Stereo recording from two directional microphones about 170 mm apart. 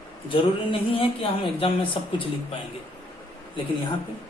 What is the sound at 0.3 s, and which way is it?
A man's voice, 30° left (ahead or behind).